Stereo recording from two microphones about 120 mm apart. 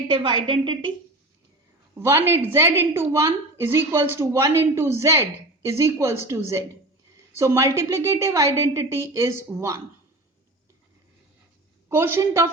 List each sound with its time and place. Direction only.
0.1 s a woman's voice: 45° right (ahead or behind)
2.0 s a woman's voice: 20° right (ahead or behind)
11.9 s a woman's voice: 20° right (ahead or behind)